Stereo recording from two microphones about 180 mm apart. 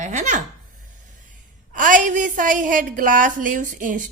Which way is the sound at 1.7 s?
45° right (ahead or behind).